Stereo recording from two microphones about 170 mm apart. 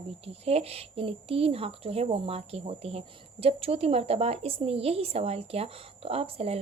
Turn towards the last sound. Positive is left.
turn(degrees=-35)  # may be behind; listen again after turning